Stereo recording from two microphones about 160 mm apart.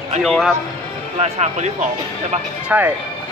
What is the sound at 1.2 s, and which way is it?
Speech, 45° right (ahead or behind).